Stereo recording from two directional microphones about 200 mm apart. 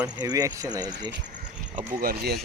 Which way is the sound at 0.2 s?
20° right (ahead or behind).